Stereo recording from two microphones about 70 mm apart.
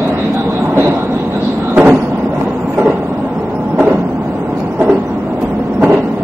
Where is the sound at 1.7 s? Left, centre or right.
Right.